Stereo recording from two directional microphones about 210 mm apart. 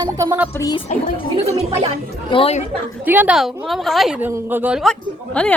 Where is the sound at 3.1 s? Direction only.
10° right (ahead or behind).